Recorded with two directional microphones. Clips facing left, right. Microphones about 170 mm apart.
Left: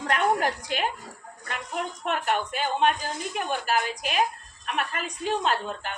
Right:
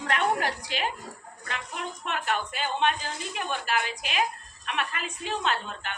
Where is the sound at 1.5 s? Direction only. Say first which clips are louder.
Left 3 dB; 45° left (ahead or behind).